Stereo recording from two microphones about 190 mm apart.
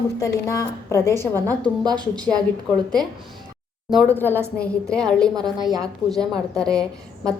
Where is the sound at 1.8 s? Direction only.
25° right (ahead or behind).